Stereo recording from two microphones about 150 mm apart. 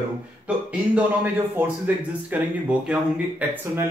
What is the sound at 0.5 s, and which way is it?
Speech, 10° right (ahead or behind).